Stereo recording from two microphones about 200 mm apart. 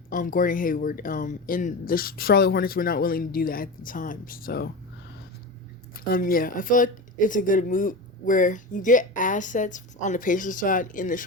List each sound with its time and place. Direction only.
0.1 s speech: 40° left (ahead or behind)
5.9 s speech: 45° left (ahead or behind)